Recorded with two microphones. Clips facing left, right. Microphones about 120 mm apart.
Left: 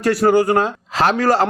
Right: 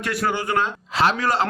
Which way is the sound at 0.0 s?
35° left (ahead or behind).